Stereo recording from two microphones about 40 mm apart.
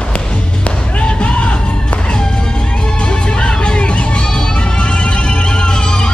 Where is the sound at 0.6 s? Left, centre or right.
Left.